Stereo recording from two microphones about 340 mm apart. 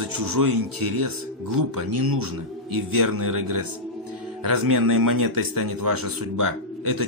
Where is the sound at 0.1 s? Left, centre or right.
Right.